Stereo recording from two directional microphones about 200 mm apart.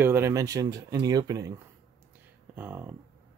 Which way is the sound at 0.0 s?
10° right (ahead or behind).